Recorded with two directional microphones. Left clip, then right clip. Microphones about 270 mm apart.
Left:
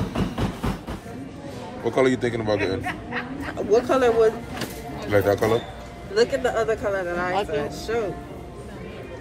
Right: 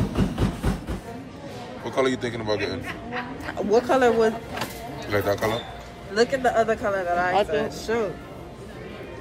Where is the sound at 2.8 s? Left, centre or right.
Left.